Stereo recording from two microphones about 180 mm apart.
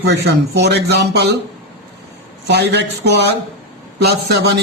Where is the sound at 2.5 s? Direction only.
65° right (ahead or behind).